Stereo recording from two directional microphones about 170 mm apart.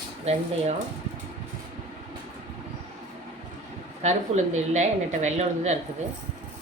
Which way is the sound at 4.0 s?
45° right (ahead or behind).